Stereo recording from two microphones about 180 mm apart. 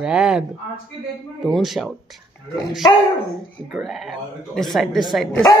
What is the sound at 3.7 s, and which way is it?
Speech, centre (ahead or behind).